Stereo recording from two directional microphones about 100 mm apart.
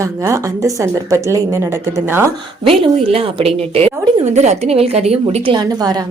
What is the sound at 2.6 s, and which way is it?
A woman's voice, 65° right (ahead or behind).